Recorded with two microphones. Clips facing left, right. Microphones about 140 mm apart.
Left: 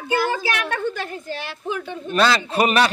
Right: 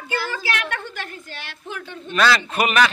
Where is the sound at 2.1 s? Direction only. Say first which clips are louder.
Left 1 dB; 30° left (ahead or behind).